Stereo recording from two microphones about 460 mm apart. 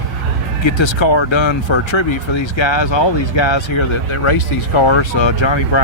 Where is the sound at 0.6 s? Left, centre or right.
Left.